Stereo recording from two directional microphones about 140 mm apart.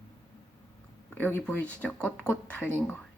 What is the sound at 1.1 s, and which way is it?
Speech, 15° left (ahead or behind).